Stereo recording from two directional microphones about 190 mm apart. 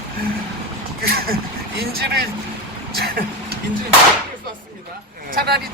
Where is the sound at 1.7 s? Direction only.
60° right (ahead or behind).